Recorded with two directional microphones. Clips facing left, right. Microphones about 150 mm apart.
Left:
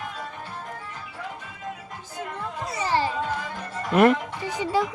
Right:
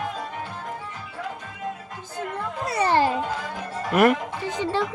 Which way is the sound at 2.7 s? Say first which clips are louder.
Right 5 dB; 60° right (ahead or behind).